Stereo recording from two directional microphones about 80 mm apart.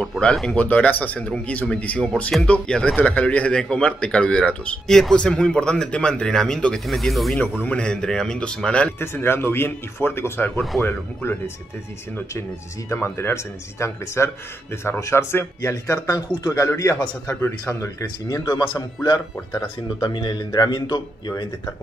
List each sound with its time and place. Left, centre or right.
0.2 s speech: centre
0.6 s speech: centre
7.6 s speech: centre
9.0 s speech: left
12.9 s speech: left
20.0 s speech: left